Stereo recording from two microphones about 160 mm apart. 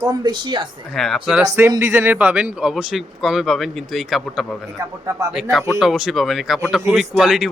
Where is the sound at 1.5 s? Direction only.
15° right (ahead or behind); by 4.4 s centre (ahead or behind).